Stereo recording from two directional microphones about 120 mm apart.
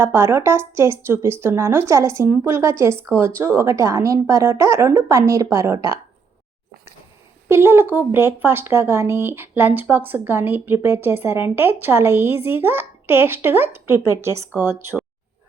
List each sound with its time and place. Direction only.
0.0 s a woman's voice: 20° right (ahead or behind)
7.4 s a woman's voice: 20° right (ahead or behind)